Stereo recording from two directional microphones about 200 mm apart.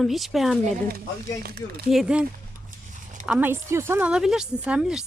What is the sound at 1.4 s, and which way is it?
Speech, 50° right (ahead or behind).